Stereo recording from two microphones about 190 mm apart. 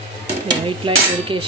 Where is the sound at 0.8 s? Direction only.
25° right (ahead or behind).